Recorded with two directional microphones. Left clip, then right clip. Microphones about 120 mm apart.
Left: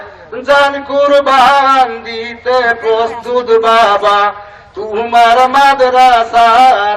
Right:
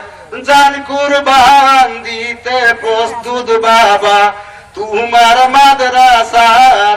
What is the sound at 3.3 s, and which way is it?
Speech, 5° left (ahead or behind).